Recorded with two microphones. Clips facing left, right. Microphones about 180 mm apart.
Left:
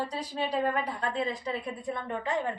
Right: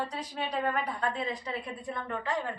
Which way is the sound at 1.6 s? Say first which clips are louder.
Left 3 dB; 20° left (ahead or behind).